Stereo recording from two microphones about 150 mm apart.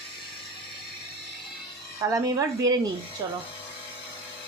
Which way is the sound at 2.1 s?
25° right (ahead or behind).